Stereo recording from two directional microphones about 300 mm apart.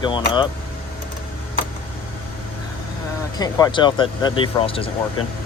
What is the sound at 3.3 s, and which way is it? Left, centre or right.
Speech, centre.